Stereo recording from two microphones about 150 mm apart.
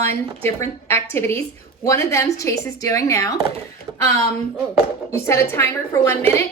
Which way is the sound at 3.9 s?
25° right (ahead or behind).